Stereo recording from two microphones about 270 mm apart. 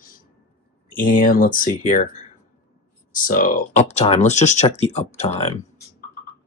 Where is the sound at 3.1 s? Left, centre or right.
Left.